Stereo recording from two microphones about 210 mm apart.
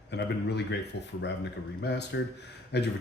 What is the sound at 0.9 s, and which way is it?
Speech, 55° left (ahead or behind).